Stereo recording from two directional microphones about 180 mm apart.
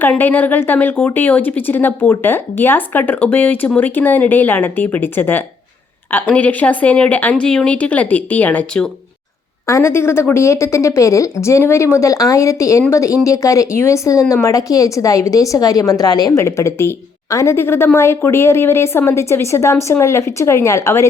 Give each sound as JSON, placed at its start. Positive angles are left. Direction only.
{"t": 0.0, "sound": "speech", "side_deg": 10}